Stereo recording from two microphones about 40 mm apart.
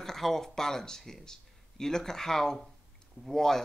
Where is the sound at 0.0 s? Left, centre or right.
Centre.